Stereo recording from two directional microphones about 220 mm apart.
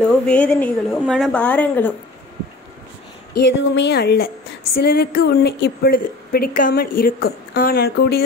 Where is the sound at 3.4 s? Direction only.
50° left (ahead or behind).